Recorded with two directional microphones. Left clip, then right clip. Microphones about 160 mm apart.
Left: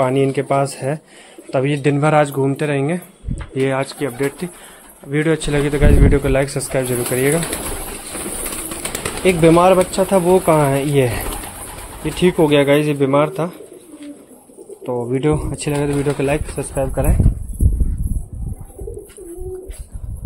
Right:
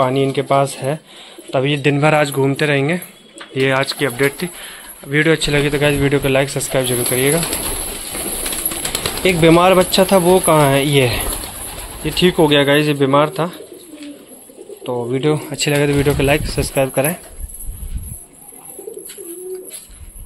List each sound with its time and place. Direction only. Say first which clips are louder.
0.0 s speech: even; 15° left (ahead or behind); by 4.5 s centre (ahead or behind)
5.1 s speech: right 3 dB; 10° left (ahead or behind)
9.2 s speech: even; centre (ahead or behind)
14.8 s speech: even; 15° left (ahead or behind)
15.8 s speech: right 2 dB; 10° right (ahead or behind)